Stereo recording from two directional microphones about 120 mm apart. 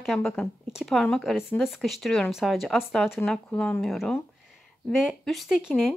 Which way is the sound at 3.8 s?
Centre (ahead or behind).